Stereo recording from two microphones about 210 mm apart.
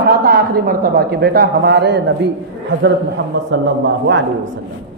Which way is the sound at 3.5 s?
60° right (ahead or behind).